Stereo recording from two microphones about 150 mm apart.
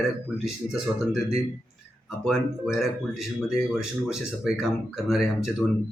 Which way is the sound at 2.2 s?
5° right (ahead or behind).